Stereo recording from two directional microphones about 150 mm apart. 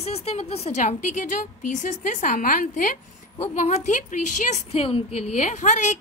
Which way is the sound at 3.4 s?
50° left (ahead or behind).